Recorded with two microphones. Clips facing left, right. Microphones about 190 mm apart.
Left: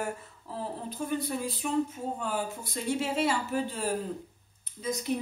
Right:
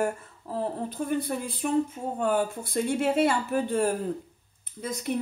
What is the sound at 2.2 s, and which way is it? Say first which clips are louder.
Speech: right 7 dB; 55° right (ahead or behind).